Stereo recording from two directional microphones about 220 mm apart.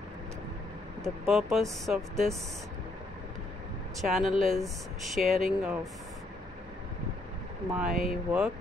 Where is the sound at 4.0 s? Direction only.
Centre (ahead or behind).